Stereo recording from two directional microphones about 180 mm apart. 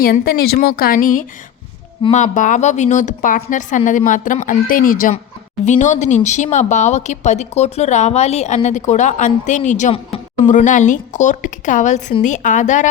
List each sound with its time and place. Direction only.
0.0 s a woman's voice: 55° left (ahead or behind)